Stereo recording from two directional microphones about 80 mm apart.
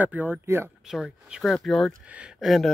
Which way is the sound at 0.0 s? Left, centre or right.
Centre.